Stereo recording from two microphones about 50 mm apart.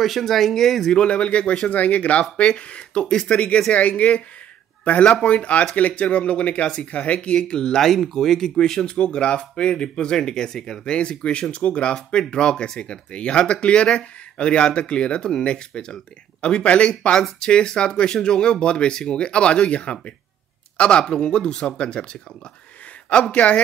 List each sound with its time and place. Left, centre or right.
0.0 s speech: centre
0.9 s speech: left
23.3 s speech: left